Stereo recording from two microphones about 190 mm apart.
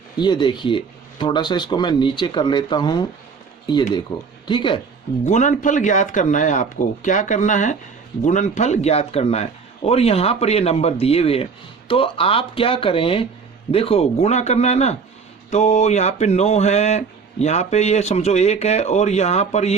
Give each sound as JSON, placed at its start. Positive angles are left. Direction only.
{"t": 0.2, "sound": "speech", "side_deg": 25}
{"t": 4.4, "sound": "speech", "side_deg": 25}
{"t": 5.2, "sound": "speech", "side_deg": 40}